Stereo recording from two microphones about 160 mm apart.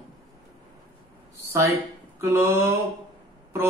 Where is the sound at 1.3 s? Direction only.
20° right (ahead or behind).